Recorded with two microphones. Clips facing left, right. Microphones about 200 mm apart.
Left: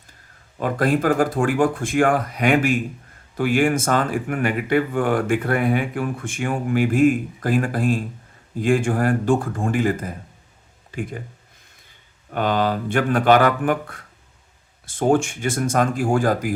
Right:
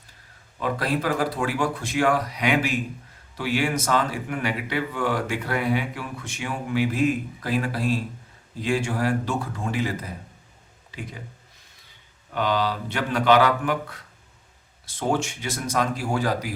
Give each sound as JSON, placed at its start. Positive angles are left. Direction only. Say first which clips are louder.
{"t": 0.6, "sound": "speech", "louder": "left 5 dB", "side_deg": 50}
{"t": 12.3, "sound": "speech", "louder": "left 4 dB", "side_deg": 50}